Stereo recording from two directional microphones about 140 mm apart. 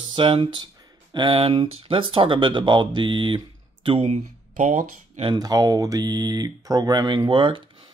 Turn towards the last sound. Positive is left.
turn(degrees=-35)  # may be behind; listen again after turning